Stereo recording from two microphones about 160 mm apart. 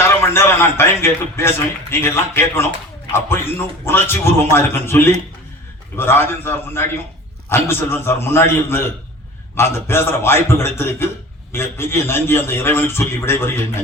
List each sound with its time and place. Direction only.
0.0 s a man's voice: 15° left (ahead or behind)